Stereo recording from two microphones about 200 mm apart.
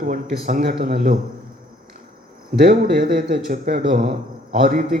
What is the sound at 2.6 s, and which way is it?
A man's voice, 40° right (ahead or behind).